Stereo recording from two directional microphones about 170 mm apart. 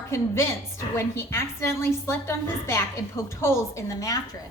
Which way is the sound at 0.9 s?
15° left (ahead or behind).